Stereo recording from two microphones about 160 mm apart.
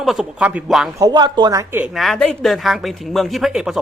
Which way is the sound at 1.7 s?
5° right (ahead or behind).